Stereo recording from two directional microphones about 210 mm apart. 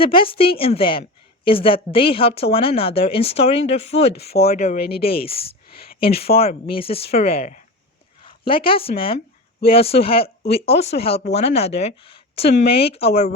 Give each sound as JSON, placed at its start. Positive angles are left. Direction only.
{"t": 0.0, "sound": "a woman's voice", "side_deg": 25}
{"t": 4.8, "sound": "speech", "side_deg": 50}
{"t": 5.2, "sound": "a woman's voice", "side_deg": 25}
{"t": 6.3, "sound": "speech", "side_deg": 40}
{"t": 6.7, "sound": "a woman's voice", "side_deg": 25}